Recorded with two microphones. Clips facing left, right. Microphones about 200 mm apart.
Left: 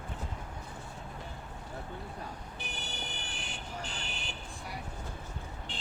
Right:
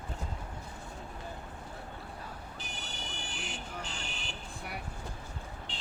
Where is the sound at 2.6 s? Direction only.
60° left (ahead or behind).